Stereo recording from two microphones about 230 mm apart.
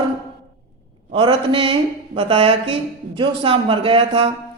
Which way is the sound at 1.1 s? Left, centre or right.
Right.